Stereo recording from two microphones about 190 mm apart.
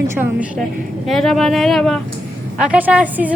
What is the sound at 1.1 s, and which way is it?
A woman's voice, centre (ahead or behind).